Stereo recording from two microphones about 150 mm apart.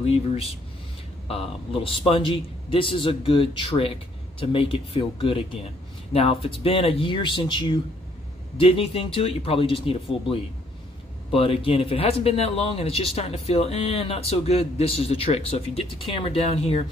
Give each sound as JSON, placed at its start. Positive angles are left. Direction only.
{"t": 0.0, "sound": "speech", "side_deg": 40}